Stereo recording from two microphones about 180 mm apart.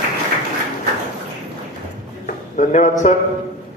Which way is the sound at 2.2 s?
45° left (ahead or behind).